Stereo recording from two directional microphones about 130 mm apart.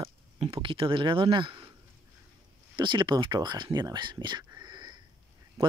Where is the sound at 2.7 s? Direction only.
35° right (ahead or behind).